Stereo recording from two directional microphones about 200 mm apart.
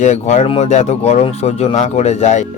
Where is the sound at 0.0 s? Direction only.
35° left (ahead or behind).